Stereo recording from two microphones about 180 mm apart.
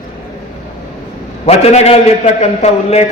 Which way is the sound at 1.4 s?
35° left (ahead or behind).